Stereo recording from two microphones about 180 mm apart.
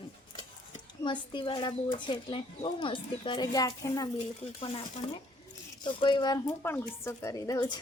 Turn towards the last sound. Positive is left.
turn(degrees=20)  # may be behind; listen again after turning